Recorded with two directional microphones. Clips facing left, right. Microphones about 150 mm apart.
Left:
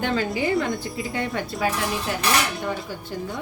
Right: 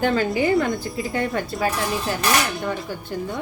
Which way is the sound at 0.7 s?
Centre (ahead or behind).